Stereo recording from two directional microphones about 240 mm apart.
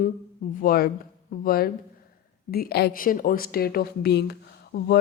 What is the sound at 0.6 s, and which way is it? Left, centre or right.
Speech, left.